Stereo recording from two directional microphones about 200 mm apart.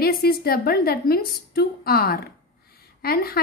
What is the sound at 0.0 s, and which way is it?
A woman's voice, 50° left (ahead or behind).